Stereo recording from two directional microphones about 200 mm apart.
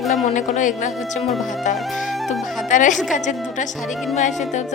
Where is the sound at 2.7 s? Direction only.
40° left (ahead or behind).